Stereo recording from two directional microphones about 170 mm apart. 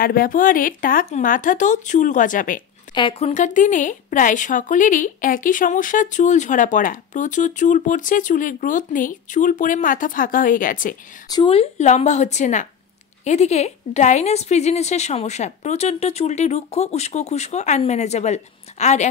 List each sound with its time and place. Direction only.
0.0 s a woman's voice: 60° left (ahead or behind)
2.9 s a woman's voice: 30° left (ahead or behind); by 11.0 s 55° left (ahead or behind)
11.2 s speech: 25° left (ahead or behind)
11.5 s a woman's voice: 40° left (ahead or behind)